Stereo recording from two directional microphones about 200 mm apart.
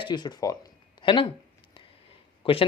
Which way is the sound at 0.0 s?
20° left (ahead or behind).